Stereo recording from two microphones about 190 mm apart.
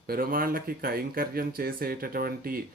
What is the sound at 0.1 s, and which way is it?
Speech, 50° right (ahead or behind).